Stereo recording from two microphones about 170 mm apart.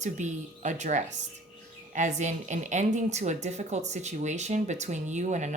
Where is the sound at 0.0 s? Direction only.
45° right (ahead or behind).